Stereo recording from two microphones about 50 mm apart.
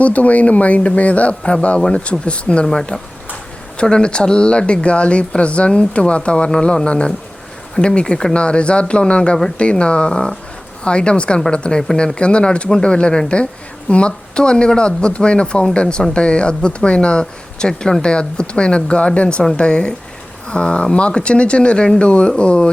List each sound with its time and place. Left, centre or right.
0.0 s a woman's voice: left